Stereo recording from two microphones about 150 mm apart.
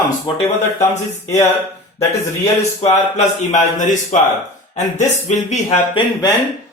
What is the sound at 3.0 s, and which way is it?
A man's voice, 55° left (ahead or behind).